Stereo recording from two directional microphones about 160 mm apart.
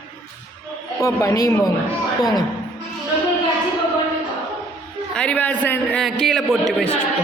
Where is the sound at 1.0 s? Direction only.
20° left (ahead or behind).